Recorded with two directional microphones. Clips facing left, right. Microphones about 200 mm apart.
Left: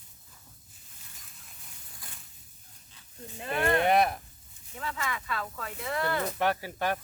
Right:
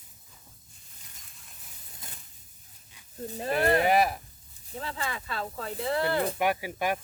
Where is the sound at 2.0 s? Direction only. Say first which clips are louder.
Right 2 dB; 25° right (ahead or behind).